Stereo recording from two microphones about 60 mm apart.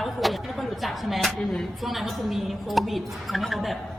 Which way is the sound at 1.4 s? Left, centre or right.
Centre.